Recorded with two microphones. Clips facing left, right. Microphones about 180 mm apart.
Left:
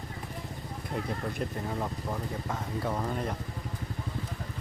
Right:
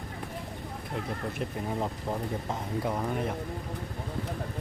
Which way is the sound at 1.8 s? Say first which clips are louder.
Right 2 dB; 20° right (ahead or behind).